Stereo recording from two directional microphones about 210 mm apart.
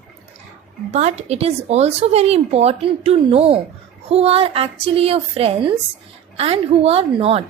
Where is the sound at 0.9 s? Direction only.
30° right (ahead or behind).